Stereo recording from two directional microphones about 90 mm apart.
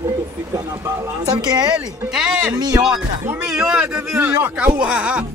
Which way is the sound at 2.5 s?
45° right (ahead or behind).